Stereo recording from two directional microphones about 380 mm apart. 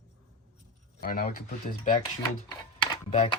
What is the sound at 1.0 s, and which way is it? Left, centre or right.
Speech, left.